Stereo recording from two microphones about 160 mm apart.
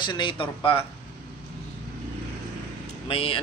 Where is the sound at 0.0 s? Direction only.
30° left (ahead or behind).